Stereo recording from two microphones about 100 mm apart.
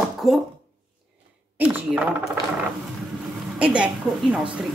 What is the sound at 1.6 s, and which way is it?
Speech, 20° right (ahead or behind).